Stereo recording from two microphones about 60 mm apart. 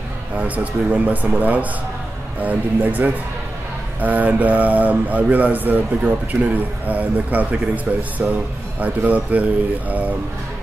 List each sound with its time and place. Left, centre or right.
0.9 s speech: right